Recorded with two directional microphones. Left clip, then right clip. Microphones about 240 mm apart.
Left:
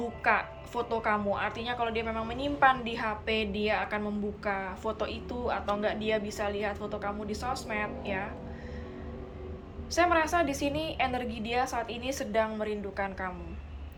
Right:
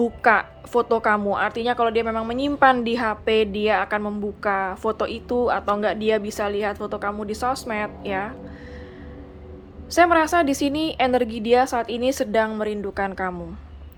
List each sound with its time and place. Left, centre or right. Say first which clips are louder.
0.2 s a woman's voice: right 7 dB; right
9.9 s a woman's voice: right 9 dB; right